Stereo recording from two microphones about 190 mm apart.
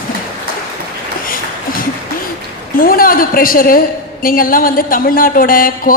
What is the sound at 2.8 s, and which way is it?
A man's voice, 50° left (ahead or behind).